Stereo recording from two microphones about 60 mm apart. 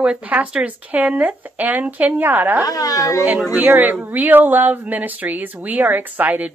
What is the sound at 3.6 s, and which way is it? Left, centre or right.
Speech, right.